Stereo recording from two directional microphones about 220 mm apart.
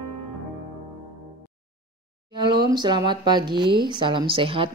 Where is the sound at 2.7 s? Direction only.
20° right (ahead or behind).